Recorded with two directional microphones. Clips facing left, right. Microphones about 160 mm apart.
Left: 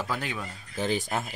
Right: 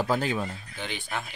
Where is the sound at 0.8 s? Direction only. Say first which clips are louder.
Left 7 dB; 40° left (ahead or behind).